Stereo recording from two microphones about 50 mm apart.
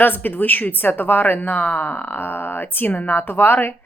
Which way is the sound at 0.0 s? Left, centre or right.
Left.